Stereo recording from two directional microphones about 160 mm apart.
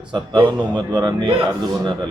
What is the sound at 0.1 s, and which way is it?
Speech, 30° right (ahead or behind).